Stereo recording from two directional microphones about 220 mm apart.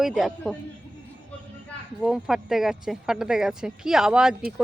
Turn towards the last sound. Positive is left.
turn(degrees=-5)  # may be behind; listen again after turning